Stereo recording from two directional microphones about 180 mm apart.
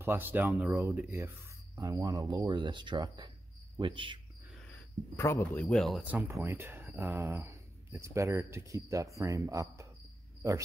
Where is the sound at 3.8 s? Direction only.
25° right (ahead or behind).